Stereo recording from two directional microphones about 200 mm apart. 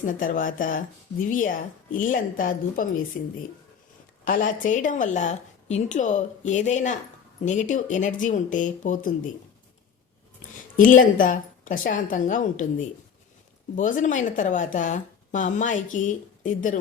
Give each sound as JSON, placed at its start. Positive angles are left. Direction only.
{"t": 0.0, "sound": "a woman's voice", "side_deg": 40}
{"t": 4.3, "sound": "speech", "side_deg": 45}
{"t": 10.8, "sound": "speech", "side_deg": 40}
{"t": 13.7, "sound": "speech", "side_deg": 40}